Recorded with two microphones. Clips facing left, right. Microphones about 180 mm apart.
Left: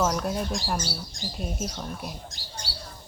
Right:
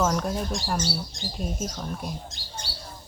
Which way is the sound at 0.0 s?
5° left (ahead or behind).